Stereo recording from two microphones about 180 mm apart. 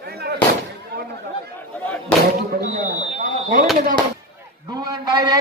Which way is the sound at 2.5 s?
45° right (ahead or behind).